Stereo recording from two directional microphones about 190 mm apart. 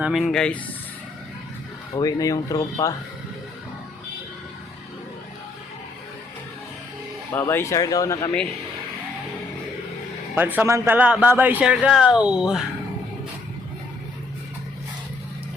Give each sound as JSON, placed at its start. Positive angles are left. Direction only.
{"t": 0.0, "sound": "speech", "side_deg": 0}
{"t": 2.0, "sound": "speech", "side_deg": 20}
{"t": 7.3, "sound": "speech", "side_deg": 15}
{"t": 10.3, "sound": "speech", "side_deg": -10}